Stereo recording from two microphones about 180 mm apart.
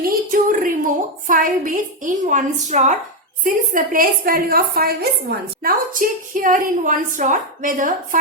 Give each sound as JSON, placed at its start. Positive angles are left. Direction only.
{"t": 0.0, "sound": "a woman's voice", "side_deg": -50}